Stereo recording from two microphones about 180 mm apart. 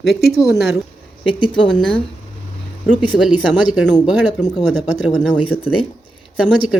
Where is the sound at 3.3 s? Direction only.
5° right (ahead or behind).